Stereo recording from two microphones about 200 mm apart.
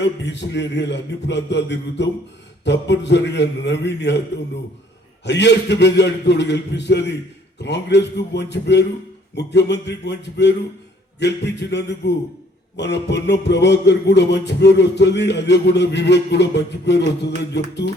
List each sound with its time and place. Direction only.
0.0 s music: 60° left (ahead or behind)
5.2 s music: 60° left (ahead or behind)